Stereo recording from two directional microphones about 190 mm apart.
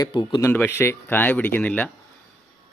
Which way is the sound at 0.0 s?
25° left (ahead or behind).